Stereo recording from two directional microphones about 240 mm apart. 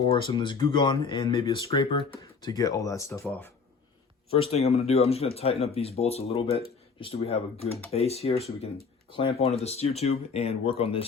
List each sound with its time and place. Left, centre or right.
0.0 s speech: left
4.3 s speech: left